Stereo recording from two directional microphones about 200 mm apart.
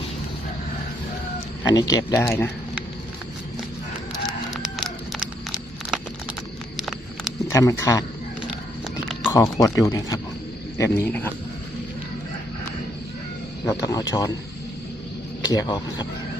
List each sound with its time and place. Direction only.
1.6 s speech: 20° left (ahead or behind)
4.3 s a sound: centre (ahead or behind)
7.4 s speech: 15° left (ahead or behind)
9.2 s speech: 15° left (ahead or behind)
13.7 s speech: 20° left (ahead or behind)
15.4 s speech: 20° left (ahead or behind)